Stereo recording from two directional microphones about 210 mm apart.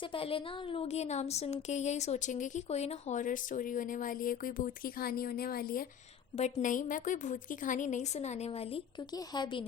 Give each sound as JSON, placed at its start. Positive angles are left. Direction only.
{"t": 0.1, "sound": "a woman's voice", "side_deg": 25}